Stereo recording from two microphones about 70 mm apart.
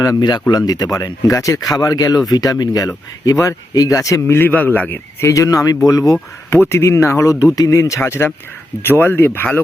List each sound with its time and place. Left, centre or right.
0.2 s speech: left
0.5 s speech: left
4.3 s a man's voice: left
5.2 s speech: left
6.5 s speech: left